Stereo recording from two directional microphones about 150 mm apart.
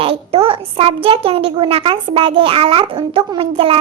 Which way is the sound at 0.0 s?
40° right (ahead or behind).